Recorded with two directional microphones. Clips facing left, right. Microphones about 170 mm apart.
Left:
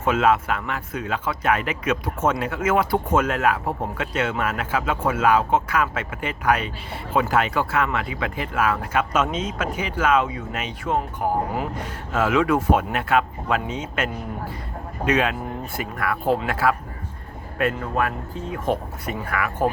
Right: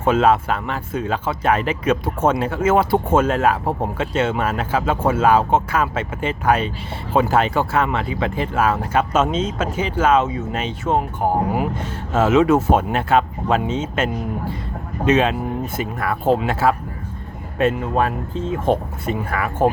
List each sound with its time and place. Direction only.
0.0 s speech: 30° right (ahead or behind)